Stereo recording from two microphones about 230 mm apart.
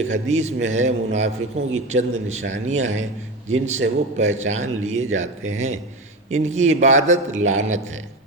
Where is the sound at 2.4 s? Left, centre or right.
Right.